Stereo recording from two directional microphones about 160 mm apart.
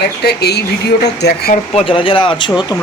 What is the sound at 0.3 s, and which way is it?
Speech, 90° left.